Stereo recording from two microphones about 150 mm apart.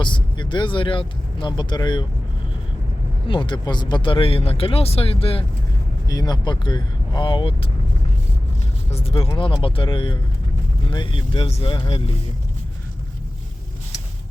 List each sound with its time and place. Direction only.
0.0 s speech: 35° left (ahead or behind)
3.2 s speech: 35° left (ahead or behind)
6.1 s speech: 25° left (ahead or behind)
8.9 s speech: 40° left (ahead or behind)